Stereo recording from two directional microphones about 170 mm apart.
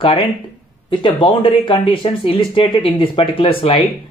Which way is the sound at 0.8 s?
30° left (ahead or behind).